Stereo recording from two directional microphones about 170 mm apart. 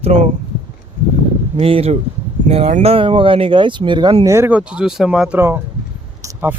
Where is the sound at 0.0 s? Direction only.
40° right (ahead or behind).